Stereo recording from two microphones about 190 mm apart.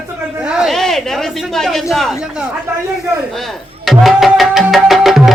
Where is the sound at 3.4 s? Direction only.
Centre (ahead or behind).